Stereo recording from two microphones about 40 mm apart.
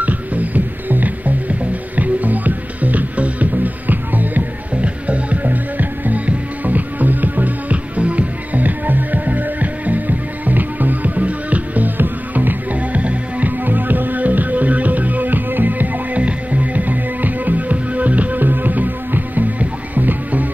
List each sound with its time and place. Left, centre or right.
0.0 s music: right
4.8 s music: right
12.7 s music: right
13.7 s music: right
16.2 s music: right